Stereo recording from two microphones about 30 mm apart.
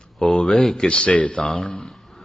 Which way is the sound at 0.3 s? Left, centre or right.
Left.